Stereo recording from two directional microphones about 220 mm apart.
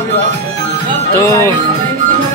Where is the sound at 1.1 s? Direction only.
15° left (ahead or behind).